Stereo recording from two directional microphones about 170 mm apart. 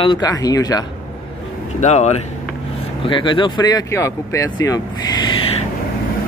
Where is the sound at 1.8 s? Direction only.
40° left (ahead or behind).